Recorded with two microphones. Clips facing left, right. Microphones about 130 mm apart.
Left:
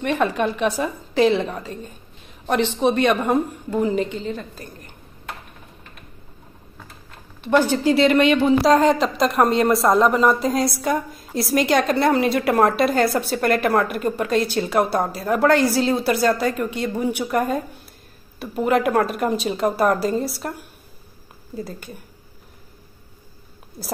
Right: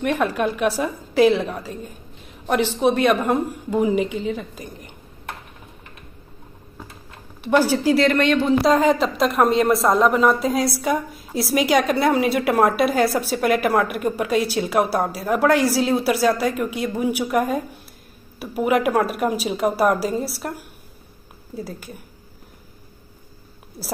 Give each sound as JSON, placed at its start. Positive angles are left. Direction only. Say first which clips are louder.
{"t": 0.0, "sound": "a woman's voice", "louder": "even", "side_deg": -5}
{"t": 7.4, "sound": "a woman's voice", "louder": "even", "side_deg": -10}
{"t": 23.8, "sound": "speech", "louder": "even", "side_deg": 0}